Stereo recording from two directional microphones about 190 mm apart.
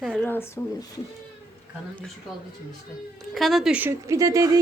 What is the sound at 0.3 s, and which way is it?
Speech, 10° left (ahead or behind).